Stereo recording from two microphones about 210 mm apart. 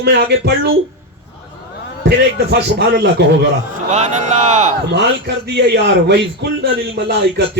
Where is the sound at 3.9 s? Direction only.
30° right (ahead or behind).